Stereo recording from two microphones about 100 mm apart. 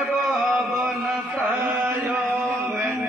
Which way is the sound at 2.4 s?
5° left (ahead or behind).